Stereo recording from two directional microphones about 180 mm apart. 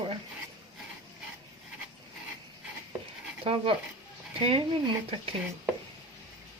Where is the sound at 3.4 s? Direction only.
30° right (ahead or behind).